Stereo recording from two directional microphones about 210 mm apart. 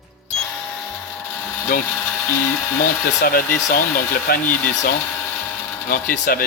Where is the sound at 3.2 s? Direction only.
45° left (ahead or behind).